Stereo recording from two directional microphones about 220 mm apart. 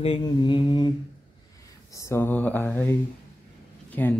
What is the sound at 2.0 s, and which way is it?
Mantra, 10° left (ahead or behind).